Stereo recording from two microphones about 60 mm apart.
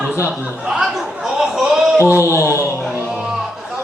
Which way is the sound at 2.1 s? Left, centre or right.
Right.